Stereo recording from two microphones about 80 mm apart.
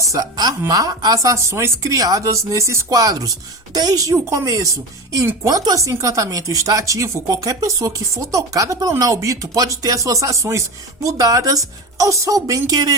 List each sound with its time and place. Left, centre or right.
0.0 s a sound: right
0.7 s speech: right
5.2 s a woman's voice: right
5.5 s speech: right